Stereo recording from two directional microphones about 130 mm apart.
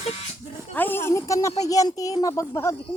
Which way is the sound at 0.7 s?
15° left (ahead or behind).